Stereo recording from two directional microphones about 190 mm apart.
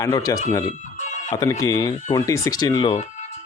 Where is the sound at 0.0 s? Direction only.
20° left (ahead or behind).